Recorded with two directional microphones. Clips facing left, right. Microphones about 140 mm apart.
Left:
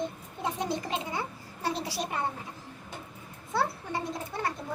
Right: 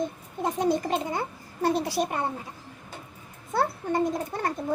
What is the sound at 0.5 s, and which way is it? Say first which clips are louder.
Speech: right 9 dB; 50° right (ahead or behind).